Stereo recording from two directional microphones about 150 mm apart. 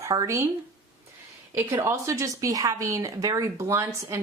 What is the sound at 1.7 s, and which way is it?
Speech, 15° right (ahead or behind).